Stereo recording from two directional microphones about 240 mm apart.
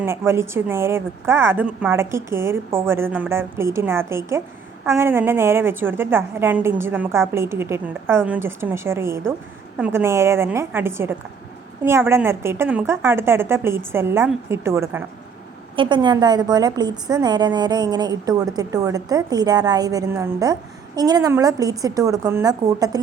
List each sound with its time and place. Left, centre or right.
0.0 s a woman's voice: centre